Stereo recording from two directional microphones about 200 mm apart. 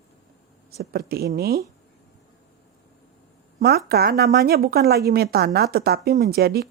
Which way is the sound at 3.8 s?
50° right (ahead or behind).